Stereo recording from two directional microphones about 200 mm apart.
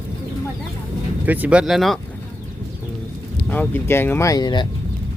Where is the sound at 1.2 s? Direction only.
10° right (ahead or behind).